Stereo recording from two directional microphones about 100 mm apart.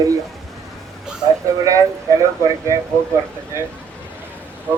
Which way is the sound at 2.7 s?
30° right (ahead or behind).